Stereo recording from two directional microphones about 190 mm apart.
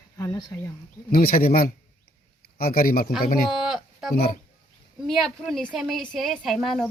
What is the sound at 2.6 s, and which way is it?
Speech, 50° left (ahead or behind).